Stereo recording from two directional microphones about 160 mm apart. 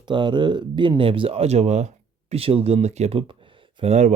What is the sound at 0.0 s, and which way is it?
Speech, 30° right (ahead or behind).